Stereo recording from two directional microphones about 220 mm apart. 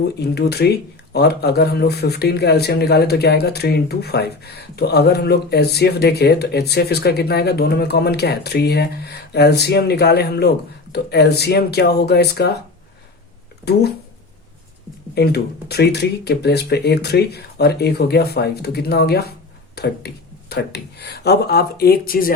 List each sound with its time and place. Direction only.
0.0 s speech: 45° left (ahead or behind)
13.7 s speech: 50° left (ahead or behind)
15.1 s speech: 45° left (ahead or behind)